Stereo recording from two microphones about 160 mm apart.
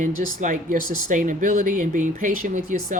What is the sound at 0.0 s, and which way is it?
Speech, 55° right (ahead or behind).